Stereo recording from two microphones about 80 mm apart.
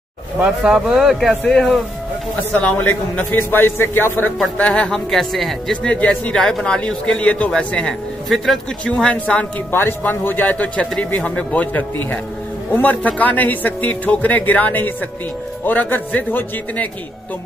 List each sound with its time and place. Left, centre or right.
0.4 s speech: centre
2.8 s a man's voice: left
4.6 s speech: centre
9.7 s a man's voice: left